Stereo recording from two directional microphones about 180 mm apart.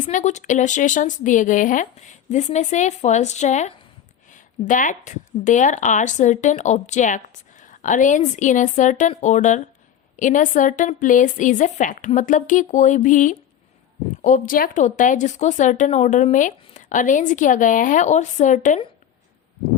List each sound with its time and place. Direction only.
0.0 s speech: 45° left (ahead or behind)